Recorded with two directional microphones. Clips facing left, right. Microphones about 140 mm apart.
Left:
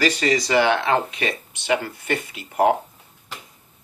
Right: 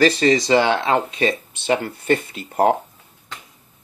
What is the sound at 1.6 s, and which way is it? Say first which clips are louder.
Speech: right 2 dB; 35° right (ahead or behind).